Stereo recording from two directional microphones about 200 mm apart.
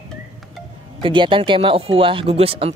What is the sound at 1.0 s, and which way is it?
Speech, 25° right (ahead or behind).